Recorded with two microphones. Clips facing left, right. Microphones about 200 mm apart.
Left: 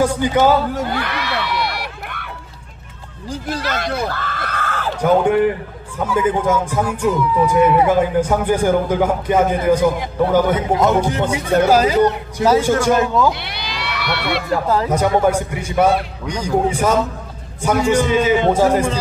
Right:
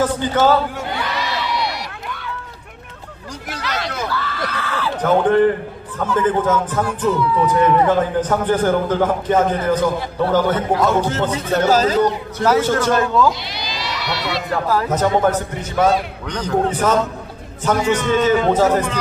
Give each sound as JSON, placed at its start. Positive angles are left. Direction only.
{"t": 0.0, "sound": "speech", "side_deg": 10}
{"t": 0.9, "sound": "music", "side_deg": 60}
{"t": 3.6, "sound": "speech", "side_deg": 50}
{"t": 5.0, "sound": "speech", "side_deg": 10}
{"t": 13.5, "sound": "run", "side_deg": 60}
{"t": 14.5, "sound": "speech", "side_deg": 25}
{"t": 14.9, "sound": "speech", "side_deg": 10}